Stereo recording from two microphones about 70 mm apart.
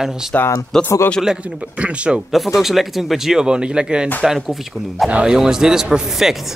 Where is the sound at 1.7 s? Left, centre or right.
Centre.